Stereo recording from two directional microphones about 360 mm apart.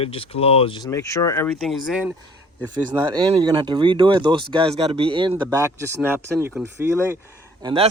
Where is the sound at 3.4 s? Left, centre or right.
Centre.